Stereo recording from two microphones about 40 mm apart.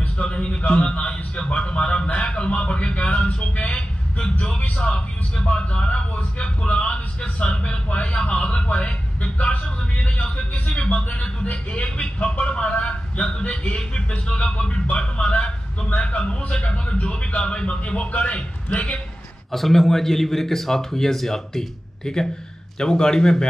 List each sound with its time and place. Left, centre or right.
0.0 s a man's voice: left
19.5 s a man's voice: centre